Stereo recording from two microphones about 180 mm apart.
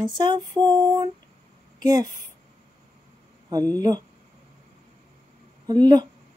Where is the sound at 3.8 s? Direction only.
20° right (ahead or behind).